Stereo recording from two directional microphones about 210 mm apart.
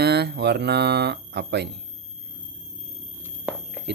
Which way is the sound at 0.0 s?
50° right (ahead or behind).